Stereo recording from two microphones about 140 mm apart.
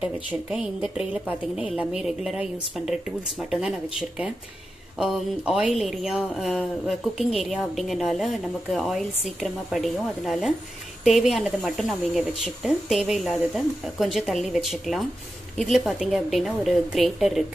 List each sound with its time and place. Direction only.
0.0 s speech: 5° right (ahead or behind)
4.9 s speech: 5° right (ahead or behind)